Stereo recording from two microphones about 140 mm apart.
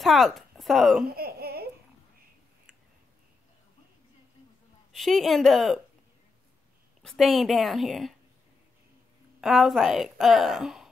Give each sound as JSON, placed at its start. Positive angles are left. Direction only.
{"t": 0.0, "sound": "speech", "side_deg": 0}
{"t": 1.0, "sound": "a sound", "side_deg": -90}
{"t": 4.9, "sound": "a woman's voice", "side_deg": 0}
{"t": 7.0, "sound": "a woman's voice", "side_deg": 0}
{"t": 9.4, "sound": "a woman's voice", "side_deg": 0}